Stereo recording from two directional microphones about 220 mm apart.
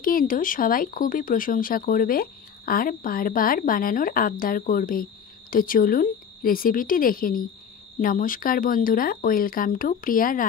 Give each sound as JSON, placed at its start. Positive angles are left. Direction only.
{"t": 0.0, "sound": "speech", "side_deg": 40}